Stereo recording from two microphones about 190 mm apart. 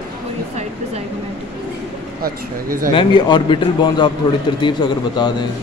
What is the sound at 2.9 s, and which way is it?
A man's voice, 25° left (ahead or behind).